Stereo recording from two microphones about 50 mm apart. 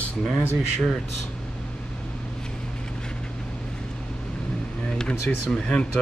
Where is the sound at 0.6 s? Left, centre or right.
Centre.